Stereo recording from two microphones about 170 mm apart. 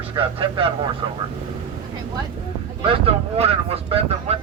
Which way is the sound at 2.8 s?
35° right (ahead or behind).